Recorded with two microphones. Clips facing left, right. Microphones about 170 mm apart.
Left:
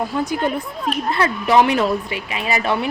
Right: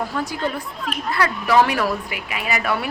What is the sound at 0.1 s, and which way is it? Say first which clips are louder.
A woman's voice: left 4 dB; 20° left (ahead or behind).